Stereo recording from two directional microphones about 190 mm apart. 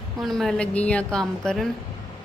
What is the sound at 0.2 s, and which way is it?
A woman's voice, centre (ahead or behind).